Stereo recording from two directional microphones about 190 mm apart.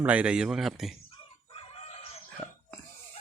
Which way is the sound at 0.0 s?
5° right (ahead or behind).